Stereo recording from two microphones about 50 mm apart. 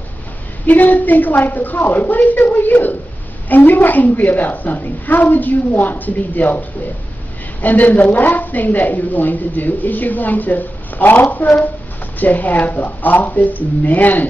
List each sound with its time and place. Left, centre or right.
0.7 s a woman's voice: left
7.6 s a woman's voice: left